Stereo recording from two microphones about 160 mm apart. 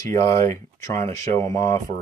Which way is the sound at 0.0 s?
20° left (ahead or behind).